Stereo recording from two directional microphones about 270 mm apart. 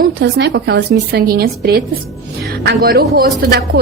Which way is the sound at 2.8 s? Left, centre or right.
Right.